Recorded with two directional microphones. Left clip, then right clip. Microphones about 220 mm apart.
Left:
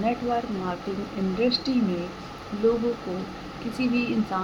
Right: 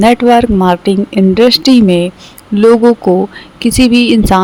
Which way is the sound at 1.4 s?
55° right (ahead or behind).